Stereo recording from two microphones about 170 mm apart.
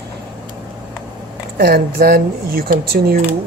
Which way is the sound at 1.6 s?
65° right (ahead or behind).